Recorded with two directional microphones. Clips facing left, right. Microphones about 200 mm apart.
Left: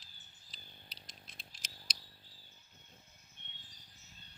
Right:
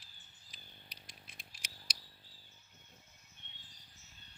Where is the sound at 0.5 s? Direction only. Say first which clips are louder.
Left 1 dB; 10° right (ahead or behind).